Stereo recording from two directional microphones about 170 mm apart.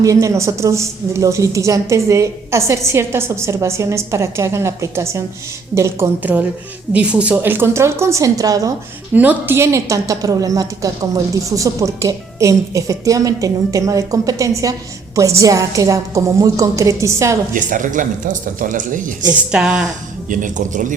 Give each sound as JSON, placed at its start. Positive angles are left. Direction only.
{"t": 0.0, "sound": "a woman's voice", "side_deg": -20}
{"t": 9.1, "sound": "a woman's voice", "side_deg": -10}
{"t": 17.5, "sound": "speech", "side_deg": -50}
{"t": 19.3, "sound": "a woman's voice", "side_deg": -5}
{"t": 20.3, "sound": "speech", "side_deg": -50}